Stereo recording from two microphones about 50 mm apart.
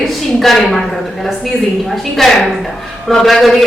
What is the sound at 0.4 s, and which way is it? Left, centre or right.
Speech, centre.